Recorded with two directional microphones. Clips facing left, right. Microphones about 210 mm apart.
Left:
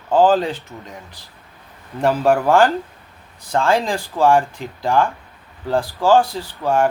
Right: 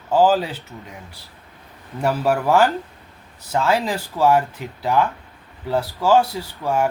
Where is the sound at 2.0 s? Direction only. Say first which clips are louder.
Left 4 dB; 5° right (ahead or behind).